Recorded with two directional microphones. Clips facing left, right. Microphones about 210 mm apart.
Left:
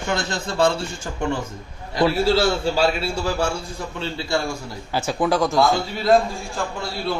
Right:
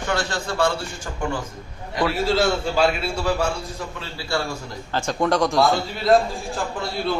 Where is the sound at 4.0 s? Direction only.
25° left (ahead or behind).